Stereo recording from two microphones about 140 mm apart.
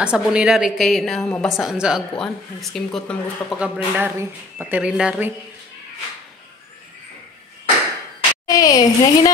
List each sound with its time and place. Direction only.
0.0 s speech: 5° right (ahead or behind)
3.5 s speech: 10° right (ahead or behind)
8.5 s a woman's voice: 25° left (ahead or behind)